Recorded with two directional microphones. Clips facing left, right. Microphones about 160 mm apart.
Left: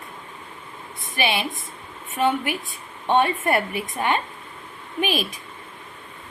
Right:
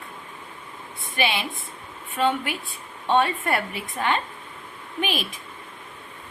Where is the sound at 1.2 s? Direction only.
15° left (ahead or behind).